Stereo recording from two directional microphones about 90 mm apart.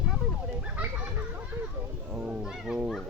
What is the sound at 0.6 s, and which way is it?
Children playing, 20° right (ahead or behind).